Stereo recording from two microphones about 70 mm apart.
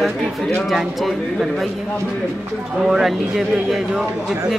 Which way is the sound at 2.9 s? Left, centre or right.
Centre.